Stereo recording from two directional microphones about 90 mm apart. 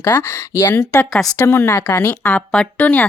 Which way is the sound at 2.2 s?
10° left (ahead or behind).